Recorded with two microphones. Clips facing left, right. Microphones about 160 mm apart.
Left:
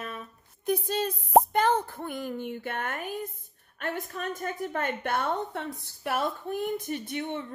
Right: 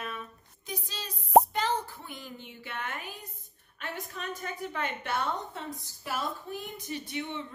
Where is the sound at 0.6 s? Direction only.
55° left (ahead or behind).